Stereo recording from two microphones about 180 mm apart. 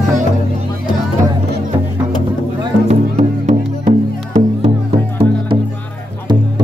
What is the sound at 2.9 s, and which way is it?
Music, 40° right (ahead or behind).